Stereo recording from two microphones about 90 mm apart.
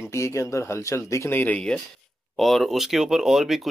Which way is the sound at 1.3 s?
15° left (ahead or behind).